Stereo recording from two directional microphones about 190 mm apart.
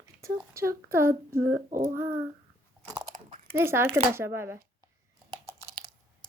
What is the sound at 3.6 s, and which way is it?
Speech, 10° right (ahead or behind).